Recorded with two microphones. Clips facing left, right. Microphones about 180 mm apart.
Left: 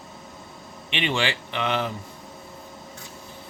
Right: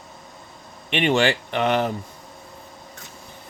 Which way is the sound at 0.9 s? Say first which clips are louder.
Right 7 dB; 50° right (ahead or behind).